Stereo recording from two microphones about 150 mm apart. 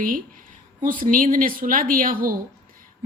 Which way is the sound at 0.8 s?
60° right (ahead or behind).